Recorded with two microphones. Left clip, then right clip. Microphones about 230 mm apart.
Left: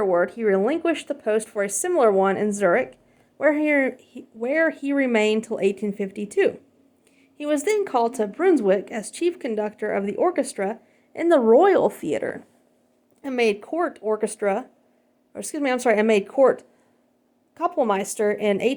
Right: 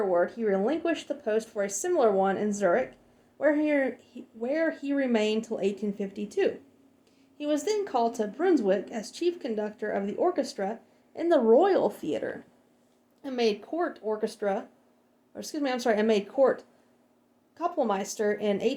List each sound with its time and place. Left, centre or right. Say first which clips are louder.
0.0 s speech: left 5 dB; left